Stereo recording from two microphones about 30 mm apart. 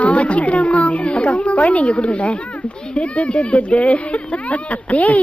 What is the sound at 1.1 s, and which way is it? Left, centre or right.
Speech, left.